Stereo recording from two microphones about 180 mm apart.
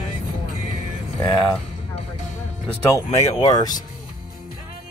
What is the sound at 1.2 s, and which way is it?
Music, 25° left (ahead or behind).